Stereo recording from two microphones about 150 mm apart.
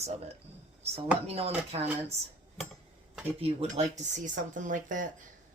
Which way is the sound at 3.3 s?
40° right (ahead or behind).